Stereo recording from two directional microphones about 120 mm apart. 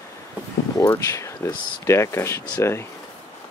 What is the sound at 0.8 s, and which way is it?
Speech, 20° left (ahead or behind).